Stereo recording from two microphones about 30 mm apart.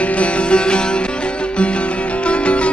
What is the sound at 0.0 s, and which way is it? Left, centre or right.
Music, left.